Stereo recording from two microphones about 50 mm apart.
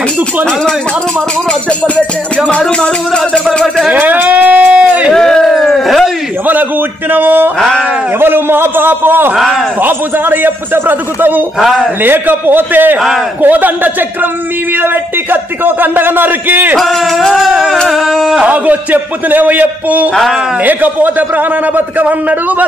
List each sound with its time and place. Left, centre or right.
2.3 s speech: centre
3.5 s a sound: centre
3.9 s a sound: right
5.1 s a sound: centre
6.4 s a man's voice: right
7.5 s speech: centre
8.2 s a man's voice: right
9.3 s music: centre
9.8 s a man's voice: right
16.7 s music: centre
18.5 s a man's voice: right